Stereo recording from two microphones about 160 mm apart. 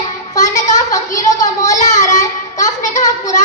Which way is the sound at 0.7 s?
20° left (ahead or behind).